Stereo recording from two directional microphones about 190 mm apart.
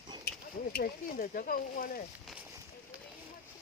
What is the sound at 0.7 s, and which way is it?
Speech, 55° left (ahead or behind).